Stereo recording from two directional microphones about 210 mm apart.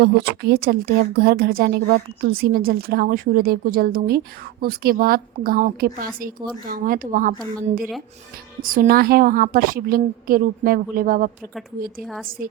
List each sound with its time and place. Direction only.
0.0 s a woman's voice: 50° right (ahead or behind)
8.6 s a woman's voice: 40° right (ahead or behind)
12.4 s speech: 40° right (ahead or behind)